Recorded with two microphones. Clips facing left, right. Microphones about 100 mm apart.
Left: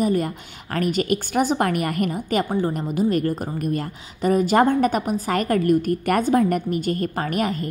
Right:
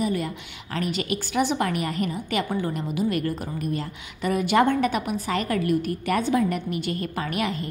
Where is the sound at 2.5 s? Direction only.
35° left (ahead or behind).